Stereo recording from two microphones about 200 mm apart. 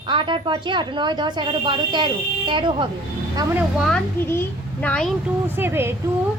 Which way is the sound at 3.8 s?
5° left (ahead or behind).